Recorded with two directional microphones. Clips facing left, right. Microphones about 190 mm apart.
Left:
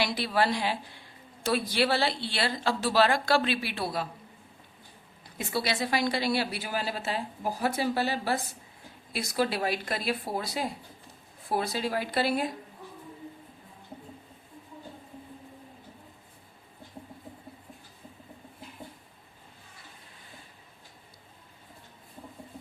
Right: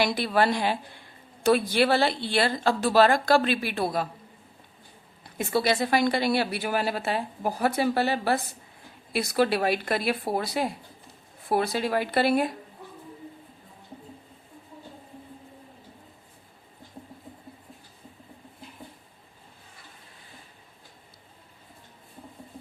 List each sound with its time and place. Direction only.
0.0 s a woman's voice: 50° right (ahead or behind)
5.4 s a woman's voice: 50° right (ahead or behind)